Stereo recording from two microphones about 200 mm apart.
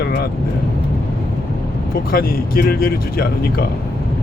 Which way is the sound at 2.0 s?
45° left (ahead or behind).